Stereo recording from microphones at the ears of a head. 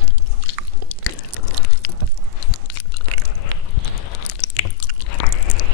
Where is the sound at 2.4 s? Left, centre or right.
Left.